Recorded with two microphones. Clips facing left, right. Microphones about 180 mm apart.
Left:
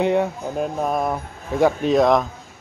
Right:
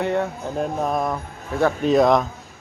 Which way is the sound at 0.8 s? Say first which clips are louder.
Left 1 dB; 5° left (ahead or behind).